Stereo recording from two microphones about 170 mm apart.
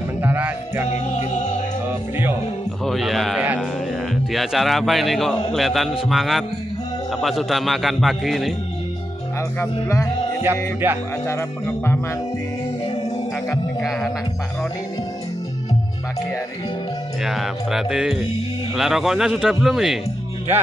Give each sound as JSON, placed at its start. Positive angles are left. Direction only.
{"t": 0.2, "sound": "music", "side_deg": -10}
{"t": 0.8, "sound": "music", "side_deg": 45}
{"t": 1.9, "sound": "music", "side_deg": -10}
{"t": 2.8, "sound": "music", "side_deg": 0}
{"t": 4.1, "sound": "a man's voice", "side_deg": 0}
{"t": 9.6, "sound": "music", "side_deg": 15}
{"t": 10.4, "sound": "speech", "side_deg": -15}
{"t": 11.2, "sound": "music", "side_deg": 15}
{"t": 13.7, "sound": "a man's voice", "side_deg": 0}
{"t": 17.2, "sound": "a man's voice", "side_deg": 0}